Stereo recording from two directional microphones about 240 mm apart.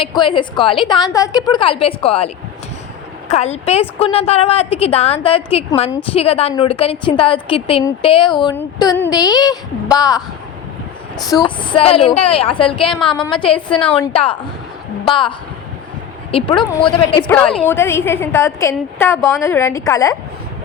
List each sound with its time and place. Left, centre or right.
0.0 s a woman's voice: centre
11.4 s a woman's voice: centre
16.3 s a woman's voice: left